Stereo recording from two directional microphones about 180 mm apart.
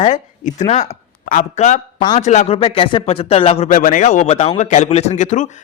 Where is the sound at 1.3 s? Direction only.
45° left (ahead or behind).